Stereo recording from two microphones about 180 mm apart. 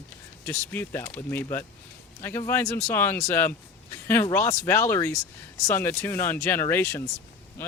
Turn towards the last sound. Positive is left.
turn(degrees=15)  # may be behind; listen again after turning